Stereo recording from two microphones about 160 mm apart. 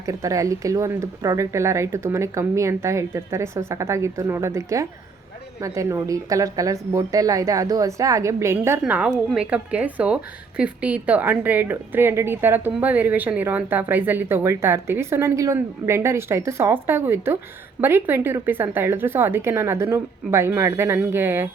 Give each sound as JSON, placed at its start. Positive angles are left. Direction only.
{"t": 0.0, "sound": "a woman's voice", "side_deg": -20}
{"t": 8.8, "sound": "a woman's voice", "side_deg": -5}